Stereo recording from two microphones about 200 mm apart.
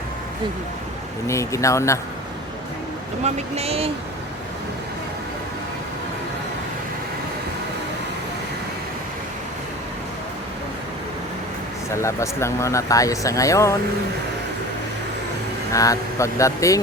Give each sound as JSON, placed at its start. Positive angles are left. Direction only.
{"t": 1.3, "sound": "speech", "side_deg": 15}
{"t": 3.2, "sound": "speech", "side_deg": -30}
{"t": 11.9, "sound": "speech", "side_deg": 15}
{"t": 15.7, "sound": "speech", "side_deg": 15}